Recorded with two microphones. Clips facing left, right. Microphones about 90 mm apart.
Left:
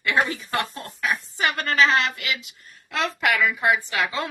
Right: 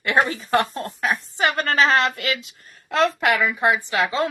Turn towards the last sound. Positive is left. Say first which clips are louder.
# right 3 dB
turn(degrees=-25)  # may be behind; listen again after turning